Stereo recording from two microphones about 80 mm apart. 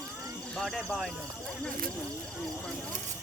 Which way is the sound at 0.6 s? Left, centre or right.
Centre.